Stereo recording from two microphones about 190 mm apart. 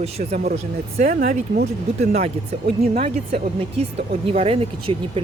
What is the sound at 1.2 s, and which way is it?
Speech, 55° right (ahead or behind).